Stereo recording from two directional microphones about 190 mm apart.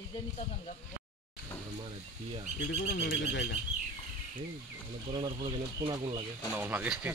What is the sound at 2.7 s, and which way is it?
Speech, 50° left (ahead or behind).